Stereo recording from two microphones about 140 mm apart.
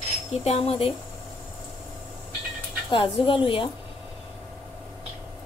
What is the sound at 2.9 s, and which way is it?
Speech, 40° left (ahead or behind).